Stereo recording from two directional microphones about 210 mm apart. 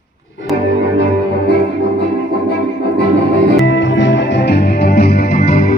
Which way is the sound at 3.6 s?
60° left (ahead or behind).